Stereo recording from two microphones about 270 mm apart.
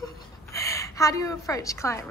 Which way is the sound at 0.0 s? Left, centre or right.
Centre.